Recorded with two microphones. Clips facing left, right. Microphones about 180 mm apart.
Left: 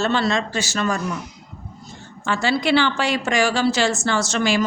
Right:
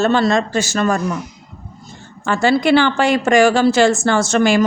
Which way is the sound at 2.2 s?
50° right (ahead or behind).